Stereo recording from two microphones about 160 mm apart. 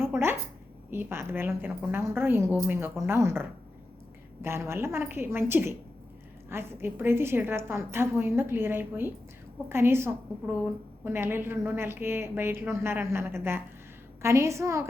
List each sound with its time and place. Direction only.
0.0 s a sound: 15° right (ahead or behind)
0.9 s a woman's voice: 15° right (ahead or behind)
4.4 s a woman's voice: 15° right (ahead or behind)